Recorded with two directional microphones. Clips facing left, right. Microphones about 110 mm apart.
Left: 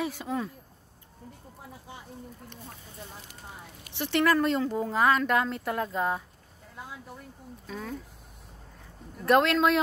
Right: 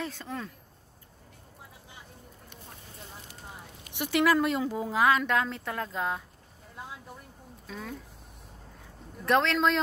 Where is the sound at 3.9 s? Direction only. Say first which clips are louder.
Even; 10° right (ahead or behind).